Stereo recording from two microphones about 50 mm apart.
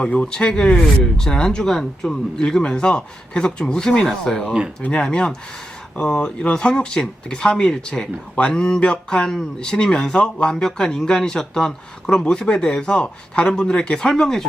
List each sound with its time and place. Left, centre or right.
0.0 s speech: centre